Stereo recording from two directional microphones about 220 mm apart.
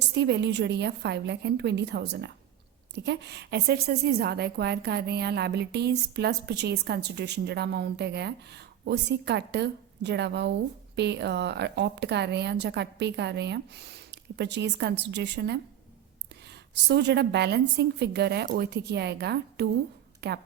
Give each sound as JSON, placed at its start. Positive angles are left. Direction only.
{"t": 0.1, "sound": "a woman's voice", "side_deg": -50}